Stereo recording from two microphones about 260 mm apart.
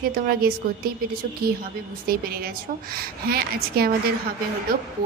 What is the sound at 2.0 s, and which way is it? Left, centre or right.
A woman's voice, right.